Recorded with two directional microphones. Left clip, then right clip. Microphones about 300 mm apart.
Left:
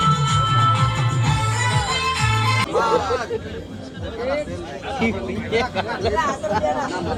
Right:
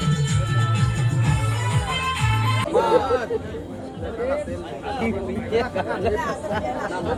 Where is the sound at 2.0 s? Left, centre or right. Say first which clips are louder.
Left 4 dB; left.